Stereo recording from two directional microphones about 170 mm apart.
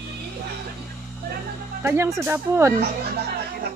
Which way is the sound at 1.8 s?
15° right (ahead or behind).